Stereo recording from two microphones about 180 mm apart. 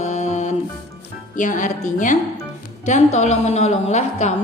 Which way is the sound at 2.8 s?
40° left (ahead or behind).